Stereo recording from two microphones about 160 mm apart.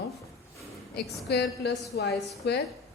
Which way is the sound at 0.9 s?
90° left.